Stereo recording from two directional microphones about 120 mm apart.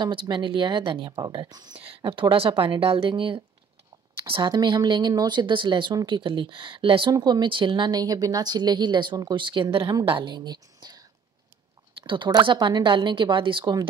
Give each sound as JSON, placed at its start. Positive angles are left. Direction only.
{"t": 0.0, "sound": "speech", "side_deg": -40}
{"t": 1.8, "sound": "a woman's voice", "side_deg": -50}